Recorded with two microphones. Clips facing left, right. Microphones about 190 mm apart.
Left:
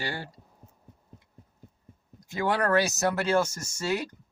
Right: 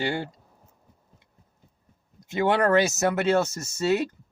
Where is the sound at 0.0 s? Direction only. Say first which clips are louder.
Right 7 dB; 20° right (ahead or behind).